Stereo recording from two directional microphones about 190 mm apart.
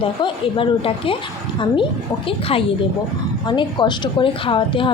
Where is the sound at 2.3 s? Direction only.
30° left (ahead or behind).